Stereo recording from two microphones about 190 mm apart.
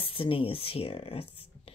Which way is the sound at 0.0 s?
30° left (ahead or behind).